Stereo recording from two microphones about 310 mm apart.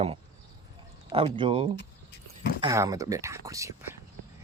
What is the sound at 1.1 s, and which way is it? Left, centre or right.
Speech, centre.